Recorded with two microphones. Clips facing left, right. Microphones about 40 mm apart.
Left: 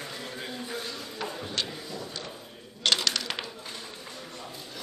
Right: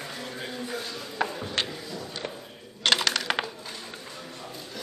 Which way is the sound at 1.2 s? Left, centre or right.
Right.